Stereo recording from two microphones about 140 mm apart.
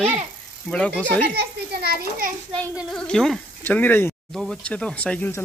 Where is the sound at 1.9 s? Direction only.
85° right.